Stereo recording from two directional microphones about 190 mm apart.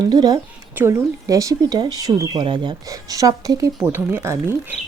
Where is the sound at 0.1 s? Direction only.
20° right (ahead or behind).